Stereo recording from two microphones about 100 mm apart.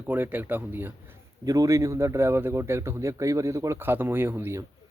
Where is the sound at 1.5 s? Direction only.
35° right (ahead or behind).